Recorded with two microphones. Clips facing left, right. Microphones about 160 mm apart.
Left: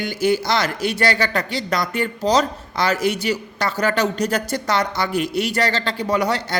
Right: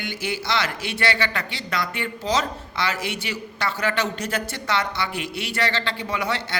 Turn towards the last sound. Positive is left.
turn(degrees=40)  # may be behind; listen again after turning